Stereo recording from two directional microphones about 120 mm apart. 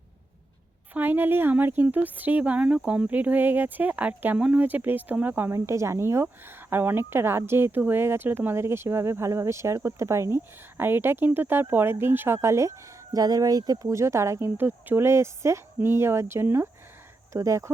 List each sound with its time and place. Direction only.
0.9 s speech: 15° right (ahead or behind)